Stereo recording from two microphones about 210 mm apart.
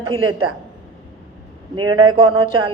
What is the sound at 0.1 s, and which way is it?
Speech, 25° right (ahead or behind).